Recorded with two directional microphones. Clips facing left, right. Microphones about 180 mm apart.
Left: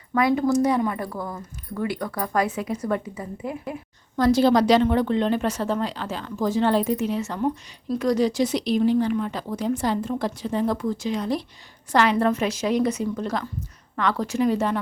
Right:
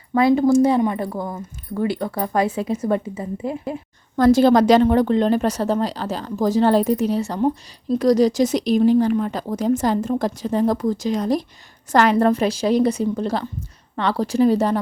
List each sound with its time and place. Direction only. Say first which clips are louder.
0.1 s speech: right 5 dB; 30° right (ahead or behind)
4.2 s speech: right 4 dB; 50° right (ahead or behind)